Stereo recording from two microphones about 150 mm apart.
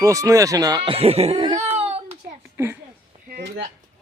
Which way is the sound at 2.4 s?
15° right (ahead or behind).